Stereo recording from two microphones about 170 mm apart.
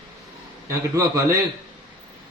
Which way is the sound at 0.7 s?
20° right (ahead or behind).